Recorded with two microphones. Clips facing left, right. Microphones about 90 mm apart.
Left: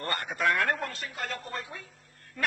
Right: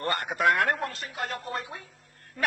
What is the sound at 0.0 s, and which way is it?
Music, 55° right (ahead or behind).